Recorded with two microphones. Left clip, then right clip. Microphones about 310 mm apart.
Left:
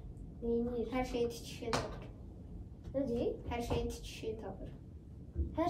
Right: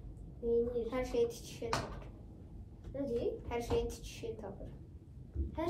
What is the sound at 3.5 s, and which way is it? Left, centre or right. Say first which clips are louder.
Speech: right 2 dB; centre.